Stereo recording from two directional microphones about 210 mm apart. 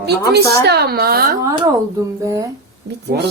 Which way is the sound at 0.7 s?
50° right (ahead or behind).